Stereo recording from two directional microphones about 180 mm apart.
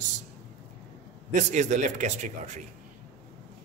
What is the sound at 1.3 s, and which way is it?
Speech, 45° right (ahead or behind).